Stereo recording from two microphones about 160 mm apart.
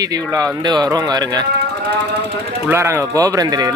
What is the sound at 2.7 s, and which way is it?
Speech, 15° right (ahead or behind).